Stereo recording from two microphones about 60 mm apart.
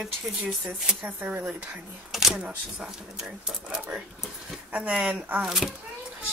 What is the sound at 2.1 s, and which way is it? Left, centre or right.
Speech, centre.